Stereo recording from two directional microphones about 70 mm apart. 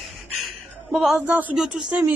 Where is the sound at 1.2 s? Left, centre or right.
Right.